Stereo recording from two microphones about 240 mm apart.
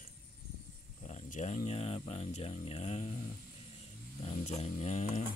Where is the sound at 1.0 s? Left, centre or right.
Left.